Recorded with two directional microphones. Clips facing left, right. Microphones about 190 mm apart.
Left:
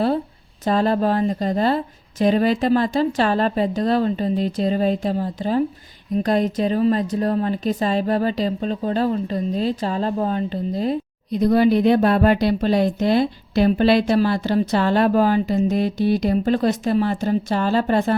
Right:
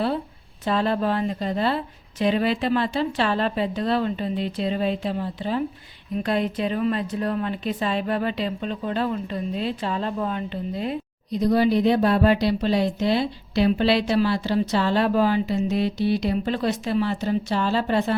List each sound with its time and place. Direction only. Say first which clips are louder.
0.6 s a woman's voice: left 4 dB; 40° left (ahead or behind)
11.3 s speech: left 4 dB; 55° left (ahead or behind)